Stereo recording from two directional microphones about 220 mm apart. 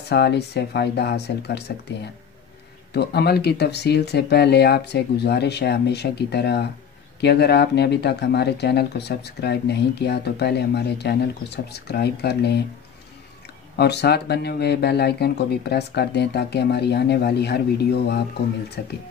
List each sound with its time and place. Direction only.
0.1 s speech: 50° left (ahead or behind)
2.9 s speech: 50° left (ahead or behind)
13.7 s speech: 50° left (ahead or behind)